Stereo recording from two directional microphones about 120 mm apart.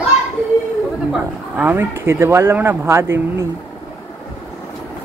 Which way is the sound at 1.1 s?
15° right (ahead or behind).